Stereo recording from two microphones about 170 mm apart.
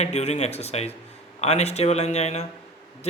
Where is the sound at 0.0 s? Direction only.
40° left (ahead or behind).